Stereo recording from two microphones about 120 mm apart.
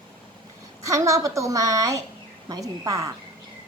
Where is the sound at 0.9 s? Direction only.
25° right (ahead or behind).